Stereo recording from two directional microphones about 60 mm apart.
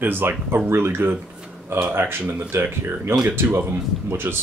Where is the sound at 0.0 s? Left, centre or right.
Right.